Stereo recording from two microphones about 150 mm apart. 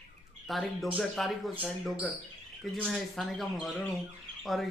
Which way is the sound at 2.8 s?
Centre (ahead or behind).